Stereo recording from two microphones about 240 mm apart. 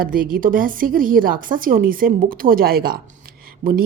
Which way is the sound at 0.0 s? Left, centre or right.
Right.